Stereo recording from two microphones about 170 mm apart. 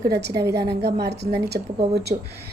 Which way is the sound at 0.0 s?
75° right (ahead or behind).